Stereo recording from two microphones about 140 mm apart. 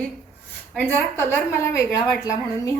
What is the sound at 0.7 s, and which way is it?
A woman's voice, 10° left (ahead or behind).